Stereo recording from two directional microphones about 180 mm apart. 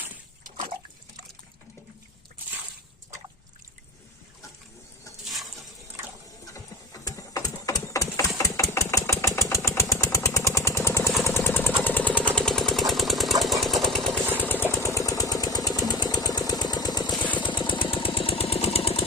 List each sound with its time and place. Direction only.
5.2 s a sound: centre (ahead or behind)
6.4 s horse: 20° left (ahead or behind)
8.4 s engine: 15° left (ahead or behind)
11.9 s a sound: 10° left (ahead or behind)
13.4 s jackhammer: centre (ahead or behind)
14.4 s engine: 10° left (ahead or behind)
17.1 s engine: 10° left (ahead or behind)
17.4 s engine: 25° left (ahead or behind)